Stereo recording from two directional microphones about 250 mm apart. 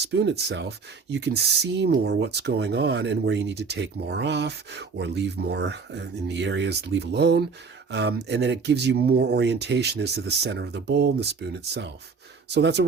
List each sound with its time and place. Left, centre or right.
0.0 s speech: right